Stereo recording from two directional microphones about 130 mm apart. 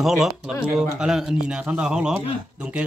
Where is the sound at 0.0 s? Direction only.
Centre (ahead or behind).